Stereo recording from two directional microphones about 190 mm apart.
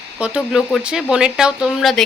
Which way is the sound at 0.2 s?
5° right (ahead or behind).